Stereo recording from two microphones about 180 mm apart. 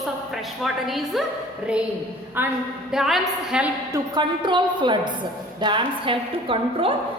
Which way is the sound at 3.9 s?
25° right (ahead or behind).